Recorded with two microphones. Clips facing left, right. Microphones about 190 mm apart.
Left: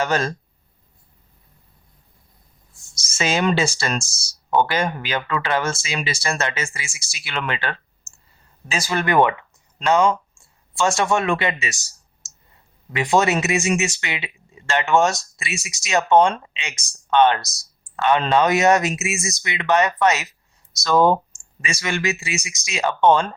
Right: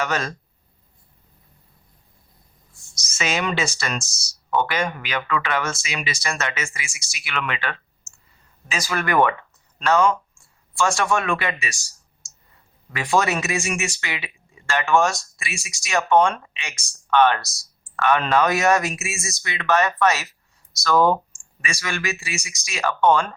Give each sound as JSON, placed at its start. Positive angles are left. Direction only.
{"t": 0.0, "sound": "speech", "side_deg": 30}
{"t": 2.9, "sound": "speech", "side_deg": 30}
{"t": 12.9, "sound": "speech", "side_deg": 20}